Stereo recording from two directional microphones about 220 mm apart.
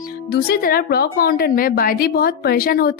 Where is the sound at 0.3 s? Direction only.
45° left (ahead or behind).